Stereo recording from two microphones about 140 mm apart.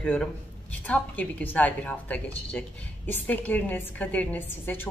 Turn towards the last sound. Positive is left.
turn(degrees=15)  # may be behind; listen again after turning